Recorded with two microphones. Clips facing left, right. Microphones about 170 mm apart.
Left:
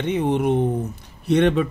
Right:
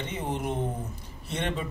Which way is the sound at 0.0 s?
65° left (ahead or behind).